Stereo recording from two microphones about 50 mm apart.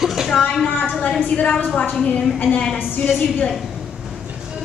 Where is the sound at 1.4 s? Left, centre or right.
Left.